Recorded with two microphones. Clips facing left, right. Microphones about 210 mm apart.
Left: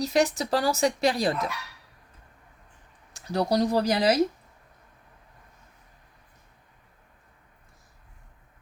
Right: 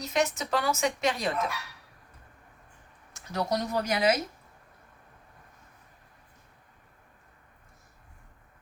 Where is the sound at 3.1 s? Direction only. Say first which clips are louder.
Left 5 dB; 35° left (ahead or behind).